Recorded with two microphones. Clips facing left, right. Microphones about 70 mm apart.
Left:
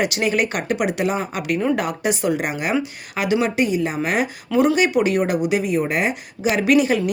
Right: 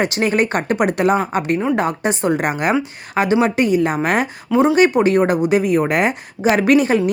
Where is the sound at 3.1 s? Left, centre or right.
Right.